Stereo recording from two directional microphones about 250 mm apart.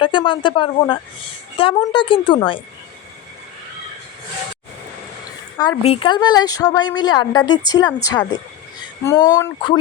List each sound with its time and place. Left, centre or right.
0.0 s a woman's voice: centre
5.5 s a woman's voice: centre